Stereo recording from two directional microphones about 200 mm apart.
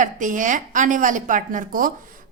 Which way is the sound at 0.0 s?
40° right (ahead or behind).